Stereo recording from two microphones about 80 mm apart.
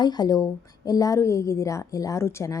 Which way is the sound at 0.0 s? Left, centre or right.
Left.